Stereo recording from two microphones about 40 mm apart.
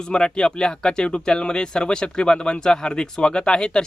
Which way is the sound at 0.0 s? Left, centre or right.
Left.